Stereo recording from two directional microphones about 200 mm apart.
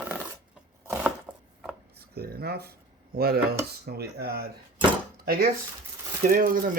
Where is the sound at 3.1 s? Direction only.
50° right (ahead or behind).